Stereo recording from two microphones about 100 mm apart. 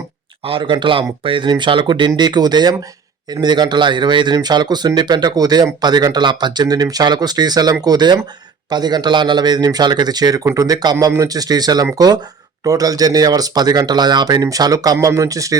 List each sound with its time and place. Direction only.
0.4 s speech: 55° right (ahead or behind); by 15.5 s 35° right (ahead or behind)